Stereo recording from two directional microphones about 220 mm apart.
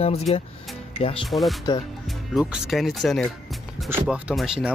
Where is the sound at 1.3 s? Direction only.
Centre (ahead or behind).